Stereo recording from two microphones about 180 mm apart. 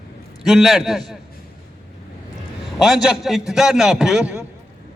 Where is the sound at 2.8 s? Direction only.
Centre (ahead or behind).